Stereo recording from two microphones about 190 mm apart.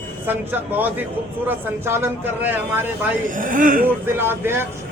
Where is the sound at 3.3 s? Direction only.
45° right (ahead or behind).